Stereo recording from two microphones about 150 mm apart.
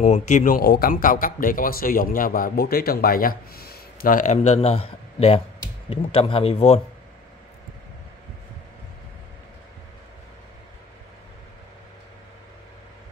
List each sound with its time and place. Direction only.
0.0 s speech: 55° left (ahead or behind)
0.6 s a man's voice: 80° left; by 6.8 s 40° left (ahead or behind)